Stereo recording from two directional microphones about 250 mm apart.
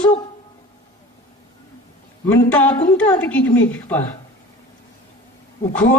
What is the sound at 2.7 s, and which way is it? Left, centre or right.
Speech, centre.